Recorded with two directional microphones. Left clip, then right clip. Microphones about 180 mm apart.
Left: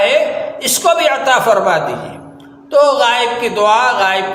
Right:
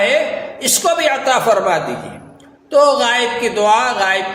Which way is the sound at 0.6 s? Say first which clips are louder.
Left 2 dB; 20° right (ahead or behind).